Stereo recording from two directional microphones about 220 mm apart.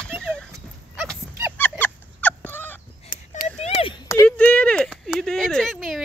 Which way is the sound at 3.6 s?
25° left (ahead or behind).